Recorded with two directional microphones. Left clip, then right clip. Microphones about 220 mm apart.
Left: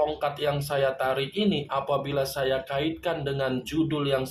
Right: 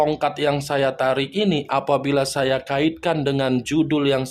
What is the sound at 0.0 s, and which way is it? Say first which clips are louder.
Speech: right 6 dB; 45° right (ahead or behind).